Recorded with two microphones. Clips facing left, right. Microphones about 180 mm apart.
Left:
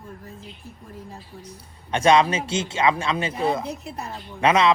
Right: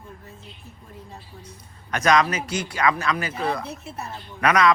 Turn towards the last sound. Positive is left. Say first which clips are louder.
# left 1 dB
turn(degrees=25)  # may be behind; listen again after turning